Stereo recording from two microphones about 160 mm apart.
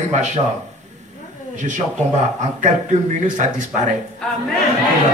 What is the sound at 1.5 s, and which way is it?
A man's voice, 50° right (ahead or behind).